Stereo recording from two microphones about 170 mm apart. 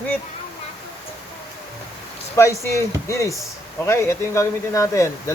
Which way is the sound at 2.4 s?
15° left (ahead or behind).